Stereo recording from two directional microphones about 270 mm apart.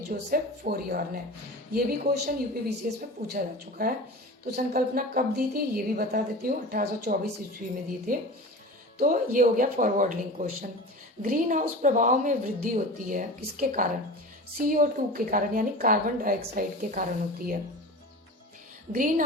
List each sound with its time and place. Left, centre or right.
0.1 s a woman's voice: right
18.9 s a woman's voice: right